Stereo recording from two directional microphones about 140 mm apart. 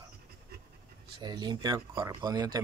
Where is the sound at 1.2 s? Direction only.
30° right (ahead or behind).